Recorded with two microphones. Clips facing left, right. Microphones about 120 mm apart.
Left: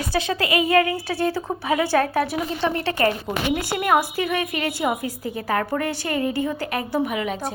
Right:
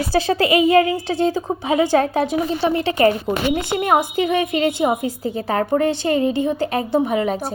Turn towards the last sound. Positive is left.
turn(degrees=-35)  # may be behind; listen again after turning